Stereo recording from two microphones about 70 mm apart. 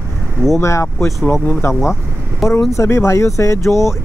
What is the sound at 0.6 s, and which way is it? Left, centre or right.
Speech, left.